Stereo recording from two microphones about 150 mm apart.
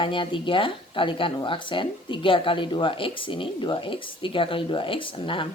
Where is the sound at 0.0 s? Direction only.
35° left (ahead or behind).